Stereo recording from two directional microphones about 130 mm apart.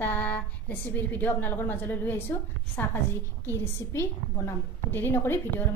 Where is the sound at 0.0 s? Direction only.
15° left (ahead or behind).